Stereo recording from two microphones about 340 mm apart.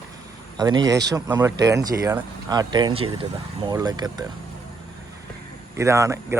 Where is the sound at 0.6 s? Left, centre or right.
Centre.